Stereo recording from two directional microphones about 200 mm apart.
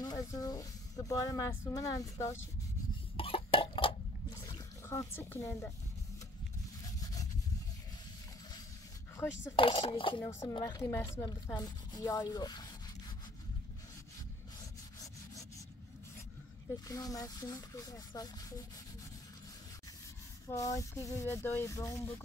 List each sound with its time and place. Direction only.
0.0 s speech: 15° left (ahead or behind)
3.2 s cough: 25° left (ahead or behind)
4.4 s a sound: 15° left (ahead or behind)
7.0 s rub: 20° left (ahead or behind)
9.2 s speech: 15° left (ahead or behind)
9.6 s speech: 25° left (ahead or behind)
16.8 s speech: 15° left (ahead or behind)
20.4 s speech: 15° left (ahead or behind)